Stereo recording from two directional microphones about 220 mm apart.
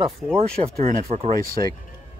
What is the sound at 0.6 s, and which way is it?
Speech, 30° right (ahead or behind).